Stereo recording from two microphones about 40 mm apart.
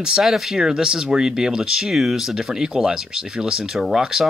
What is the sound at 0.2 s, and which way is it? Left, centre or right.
Speech, centre.